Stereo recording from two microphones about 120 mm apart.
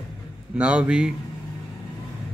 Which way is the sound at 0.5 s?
10° right (ahead or behind).